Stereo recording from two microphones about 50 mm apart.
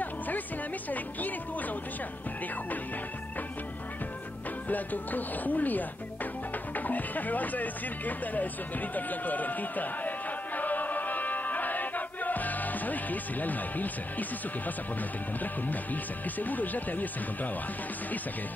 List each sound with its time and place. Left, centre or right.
0.8 s speech: left
4.6 s speech: left
8.9 s music: left
15.4 s speech: left